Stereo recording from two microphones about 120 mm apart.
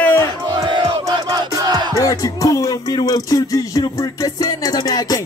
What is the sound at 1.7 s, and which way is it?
Music, 35° right (ahead or behind).